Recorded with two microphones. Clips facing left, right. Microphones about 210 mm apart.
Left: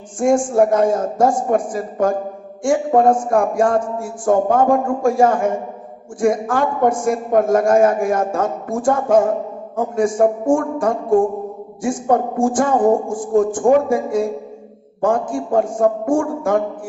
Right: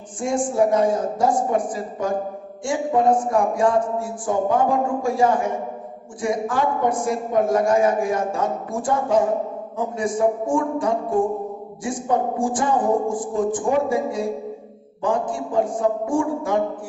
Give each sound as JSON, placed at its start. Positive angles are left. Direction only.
{"t": 0.2, "sound": "a man's voice", "side_deg": 50}